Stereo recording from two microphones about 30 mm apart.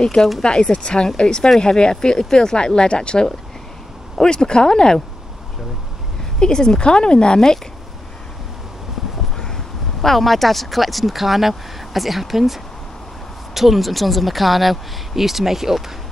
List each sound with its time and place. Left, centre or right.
0.0 s speech: left
6.4 s speech: left
7.3 s speech: centre
10.0 s speech: centre